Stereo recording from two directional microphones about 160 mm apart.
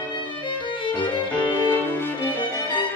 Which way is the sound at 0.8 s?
30° left (ahead or behind).